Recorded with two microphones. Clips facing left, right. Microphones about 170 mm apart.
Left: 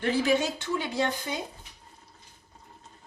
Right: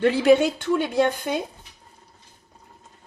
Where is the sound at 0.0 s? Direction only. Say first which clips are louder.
Right 8 dB; 70° right (ahead or behind).